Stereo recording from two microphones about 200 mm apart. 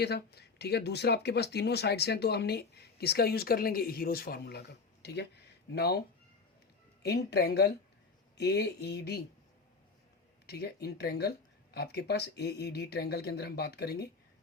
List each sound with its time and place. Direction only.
0.0 s speech: 55° left (ahead or behind)
7.0 s speech: 55° left (ahead or behind)
10.4 s speech: 55° left (ahead or behind)